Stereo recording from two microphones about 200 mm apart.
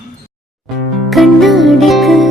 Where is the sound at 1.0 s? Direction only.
Centre (ahead or behind).